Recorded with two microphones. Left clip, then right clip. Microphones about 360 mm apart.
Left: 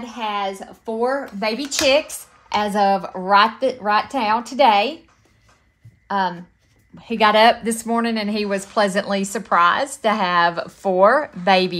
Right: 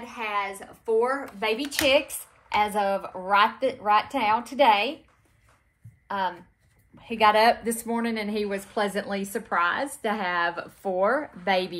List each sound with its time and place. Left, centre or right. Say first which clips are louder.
0.0 s speech: left 5 dB; left
7.1 s speech: left 5 dB; left